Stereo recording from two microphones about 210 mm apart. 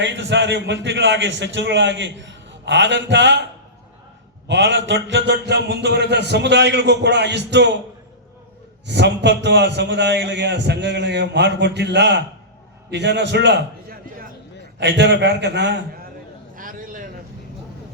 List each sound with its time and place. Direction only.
0.0 s a man's voice: 55° right (ahead or behind)
4.4 s a man's voice: 60° right (ahead or behind)
8.9 s a man's voice: 55° right (ahead or behind)
14.8 s a man's voice: 55° right (ahead or behind)
16.6 s a sound: 40° right (ahead or behind)